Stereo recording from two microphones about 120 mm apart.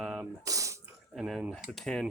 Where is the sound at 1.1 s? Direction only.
5° right (ahead or behind).